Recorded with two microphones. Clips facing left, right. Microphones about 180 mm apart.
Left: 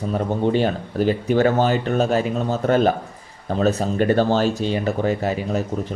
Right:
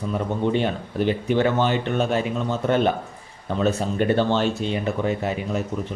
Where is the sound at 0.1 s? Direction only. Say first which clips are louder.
Left 3 dB; 40° left (ahead or behind).